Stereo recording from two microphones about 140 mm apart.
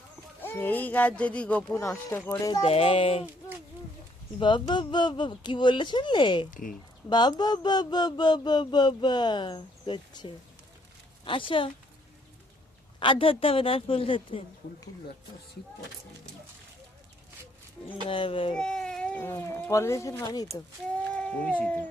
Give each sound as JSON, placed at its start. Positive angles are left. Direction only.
{"t": 0.4, "sound": "speech", "side_deg": 15}
{"t": 1.8, "sound": "speech", "side_deg": 20}
{"t": 2.5, "sound": "speech", "side_deg": 40}
{"t": 4.4, "sound": "speech", "side_deg": 35}
{"t": 6.5, "sound": "speech", "side_deg": 70}
{"t": 7.1, "sound": "speech", "side_deg": 30}
{"t": 13.0, "sound": "speech", "side_deg": 40}
{"t": 18.1, "sound": "speech", "side_deg": 40}
{"t": 18.5, "sound": "speech", "side_deg": 5}
{"t": 19.2, "sound": "speech", "side_deg": 15}
{"t": 21.1, "sound": "a sound", "side_deg": 5}